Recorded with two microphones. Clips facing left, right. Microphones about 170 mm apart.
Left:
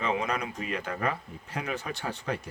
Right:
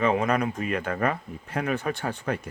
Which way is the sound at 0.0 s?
55° right (ahead or behind).